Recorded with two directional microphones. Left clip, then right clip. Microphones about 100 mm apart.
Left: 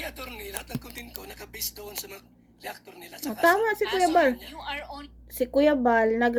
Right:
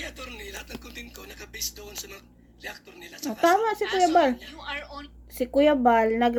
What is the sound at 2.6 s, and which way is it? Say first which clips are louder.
Speech: even; 50° left (ahead or behind).